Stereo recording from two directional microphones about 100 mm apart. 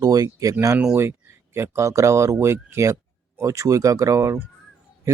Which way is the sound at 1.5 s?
25° right (ahead or behind).